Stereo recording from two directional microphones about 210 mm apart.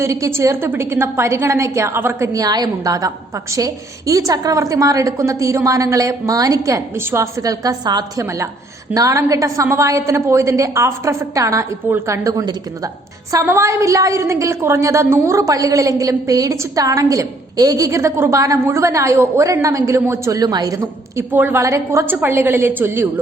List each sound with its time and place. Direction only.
0.0 s a woman's voice: 15° right (ahead or behind)